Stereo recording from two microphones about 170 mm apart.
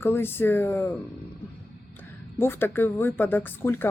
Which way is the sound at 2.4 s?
15° left (ahead or behind).